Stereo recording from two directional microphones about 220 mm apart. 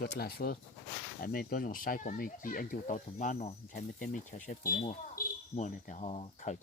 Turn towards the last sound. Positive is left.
turn(degrees=30)  # may be behind; listen again after turning